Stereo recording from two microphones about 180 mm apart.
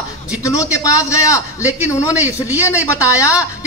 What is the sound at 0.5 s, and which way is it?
Speech, 20° left (ahead or behind).